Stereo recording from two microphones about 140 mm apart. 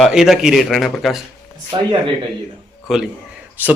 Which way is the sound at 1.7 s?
35° right (ahead or behind).